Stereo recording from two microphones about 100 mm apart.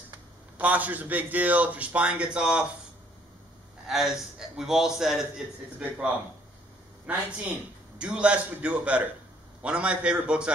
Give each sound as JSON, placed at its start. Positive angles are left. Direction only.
{"t": 0.6, "sound": "a man's voice", "side_deg": -15}
{"t": 3.8, "sound": "a man's voice", "side_deg": -5}